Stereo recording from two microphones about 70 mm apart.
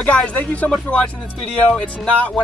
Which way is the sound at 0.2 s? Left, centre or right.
Left.